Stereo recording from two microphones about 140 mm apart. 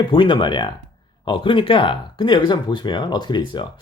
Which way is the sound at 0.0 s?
35° left (ahead or behind).